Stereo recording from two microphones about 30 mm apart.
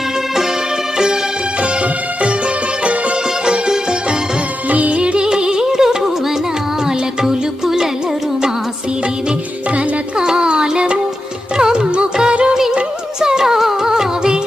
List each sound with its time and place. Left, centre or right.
0.9 s music: right
1.6 s music: right
3.4 s music: right
4.7 s music: right
4.9 s music: right; by 6.1 s centre
7.2 s music: right
10.2 s music: right
12.3 s music: right
13.1 s music: right